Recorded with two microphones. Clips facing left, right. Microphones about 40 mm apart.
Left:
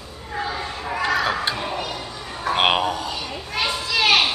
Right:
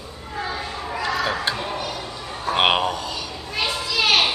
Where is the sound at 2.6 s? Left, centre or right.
Centre.